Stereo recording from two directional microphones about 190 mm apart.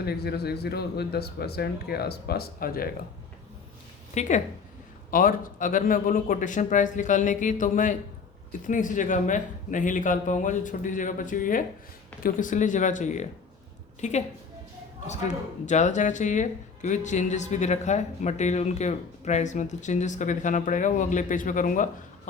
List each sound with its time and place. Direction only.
0.0 s speech: 55° left (ahead or behind)
4.1 s speech: 40° left (ahead or behind)
15.6 s speech: 40° left (ahead or behind)